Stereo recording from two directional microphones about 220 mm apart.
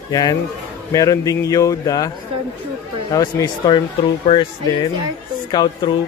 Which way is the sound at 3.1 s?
15° left (ahead or behind).